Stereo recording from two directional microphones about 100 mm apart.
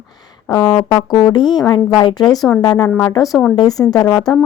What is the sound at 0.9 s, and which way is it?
Speech, 45° left (ahead or behind).